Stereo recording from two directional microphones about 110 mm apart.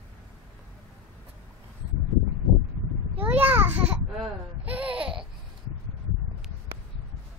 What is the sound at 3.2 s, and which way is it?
A woman's voice, 15° right (ahead or behind).